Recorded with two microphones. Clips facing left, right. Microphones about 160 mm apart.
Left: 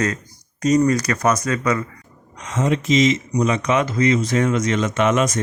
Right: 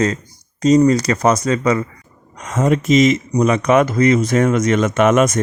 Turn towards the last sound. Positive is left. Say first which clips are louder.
# right 5 dB
turn(degrees=-50)  # may be behind; listen again after turning